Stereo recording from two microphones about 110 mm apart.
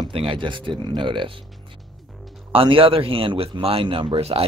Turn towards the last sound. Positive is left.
turn(degrees=-65)  # may be behind; listen again after turning